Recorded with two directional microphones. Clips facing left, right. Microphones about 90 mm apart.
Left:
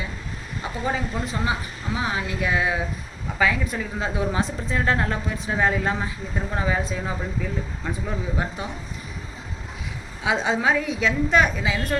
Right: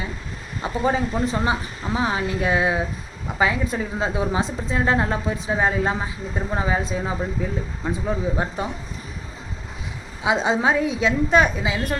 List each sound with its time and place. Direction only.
0.6 s a woman's voice: 30° right (ahead or behind)
10.2 s a woman's voice: 20° right (ahead or behind)